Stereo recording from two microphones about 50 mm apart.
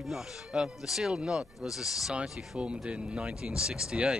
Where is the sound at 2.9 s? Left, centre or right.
Centre.